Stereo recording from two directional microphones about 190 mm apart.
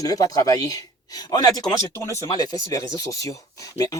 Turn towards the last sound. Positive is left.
turn(degrees=15)  # may be behind; listen again after turning